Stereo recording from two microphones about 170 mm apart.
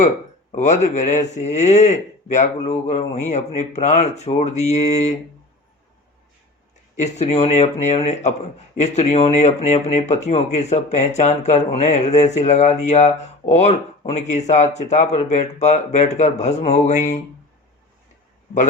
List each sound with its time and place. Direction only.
0.5 s speech: 45° left (ahead or behind)
6.9 s speech: 40° left (ahead or behind)